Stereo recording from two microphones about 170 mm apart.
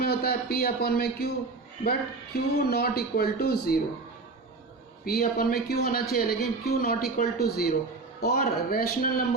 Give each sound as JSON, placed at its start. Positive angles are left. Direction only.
{"t": 0.0, "sound": "a man's voice", "side_deg": 65}
{"t": 5.0, "sound": "a man's voice", "side_deg": 65}